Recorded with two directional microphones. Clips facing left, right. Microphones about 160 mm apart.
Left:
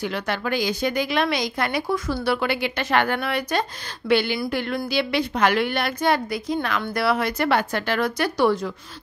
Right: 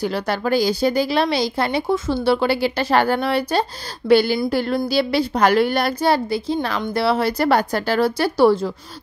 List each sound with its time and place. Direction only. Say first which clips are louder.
0.0 s speech: right 4 dB; 35° right (ahead or behind)